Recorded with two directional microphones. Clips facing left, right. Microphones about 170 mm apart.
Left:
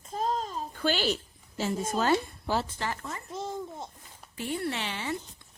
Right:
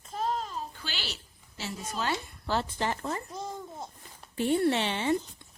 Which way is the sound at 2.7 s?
25° right (ahead or behind).